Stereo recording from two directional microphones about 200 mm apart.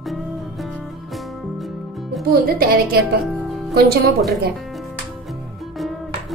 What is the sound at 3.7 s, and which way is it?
Speech, 50° right (ahead or behind).